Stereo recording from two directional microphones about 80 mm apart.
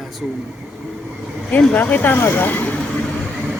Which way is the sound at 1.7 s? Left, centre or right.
Left.